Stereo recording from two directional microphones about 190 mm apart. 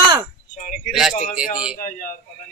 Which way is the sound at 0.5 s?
40° left (ahead or behind).